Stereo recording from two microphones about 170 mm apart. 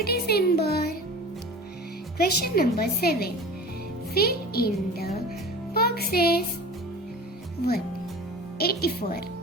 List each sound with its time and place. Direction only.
0.0 s music: 65° left (ahead or behind)
2.1 s a woman's voice: 65° left (ahead or behind)
5.7 s music: 65° left (ahead or behind)
8.5 s a woman's voice: 65° left (ahead or behind)